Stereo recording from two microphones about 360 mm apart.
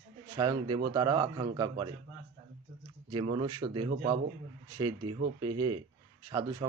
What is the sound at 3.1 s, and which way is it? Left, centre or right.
Speech, centre.